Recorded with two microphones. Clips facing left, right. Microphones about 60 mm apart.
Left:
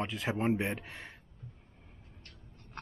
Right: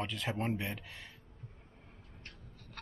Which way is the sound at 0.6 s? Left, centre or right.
Left.